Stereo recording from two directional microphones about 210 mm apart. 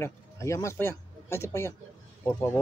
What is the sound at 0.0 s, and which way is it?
Speech, 15° left (ahead or behind).